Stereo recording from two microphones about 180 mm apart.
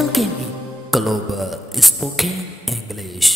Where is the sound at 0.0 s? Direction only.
Centre (ahead or behind).